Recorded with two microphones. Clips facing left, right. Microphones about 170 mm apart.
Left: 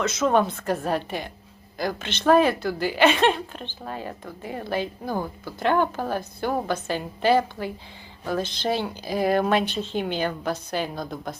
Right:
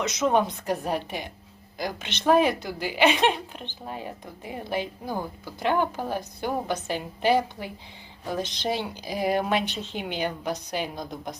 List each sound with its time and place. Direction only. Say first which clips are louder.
0.0 s a woman's voice: left 2 dB; 15° right (ahead or behind)